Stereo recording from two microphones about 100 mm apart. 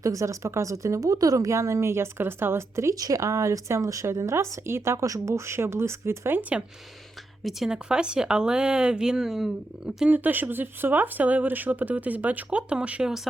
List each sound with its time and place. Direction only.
0.0 s a woman's voice: 35° right (ahead or behind)
7.4 s speech: 5° right (ahead or behind)
10.1 s speech: 20° right (ahead or behind)